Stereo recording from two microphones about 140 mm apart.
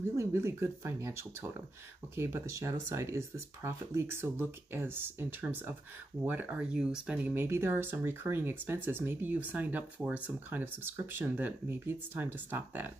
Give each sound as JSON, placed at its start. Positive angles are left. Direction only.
{"t": 0.1, "sound": "speech", "side_deg": -20}